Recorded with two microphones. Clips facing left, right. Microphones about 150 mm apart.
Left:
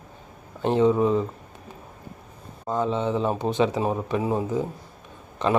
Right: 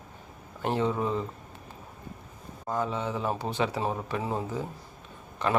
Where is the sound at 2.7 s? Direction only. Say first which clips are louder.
Left 6 dB; 20° left (ahead or behind).